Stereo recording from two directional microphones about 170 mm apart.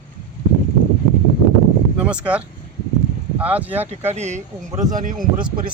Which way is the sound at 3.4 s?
10° right (ahead or behind).